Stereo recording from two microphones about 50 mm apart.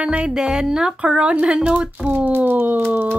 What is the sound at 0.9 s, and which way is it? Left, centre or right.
Speech, right.